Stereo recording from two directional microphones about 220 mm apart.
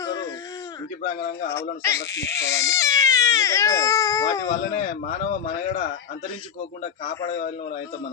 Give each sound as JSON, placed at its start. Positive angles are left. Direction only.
{"t": 1.8, "sound": "speech", "side_deg": 10}
{"t": 5.2, "sound": "speech", "side_deg": 35}